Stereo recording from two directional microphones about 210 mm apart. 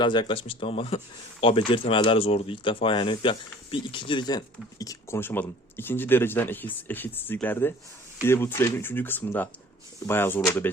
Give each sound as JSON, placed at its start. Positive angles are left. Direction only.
{"t": 0.0, "sound": "speech", "side_deg": 20}